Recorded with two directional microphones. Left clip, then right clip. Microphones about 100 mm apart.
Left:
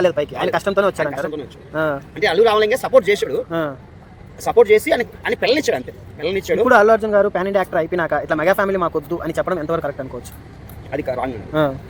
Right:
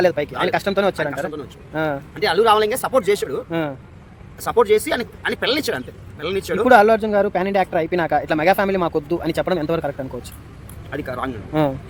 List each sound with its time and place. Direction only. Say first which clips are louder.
0.0 s speech: left 1 dB; 30° right (ahead or behind)
6.7 s speech: even; 45° right (ahead or behind)
9.4 s speech: left 2 dB; 70° right (ahead or behind)
10.9 s speech: left 4 dB; 25° right (ahead or behind)